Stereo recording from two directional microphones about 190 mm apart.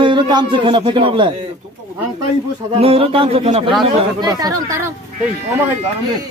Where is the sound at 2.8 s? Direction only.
30° right (ahead or behind).